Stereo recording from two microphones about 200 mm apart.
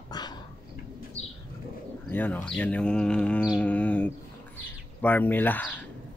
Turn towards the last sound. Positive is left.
turn(degrees=10)  # may be behind; listen again after turning